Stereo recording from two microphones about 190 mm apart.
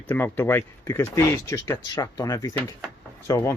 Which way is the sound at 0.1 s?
10° left (ahead or behind).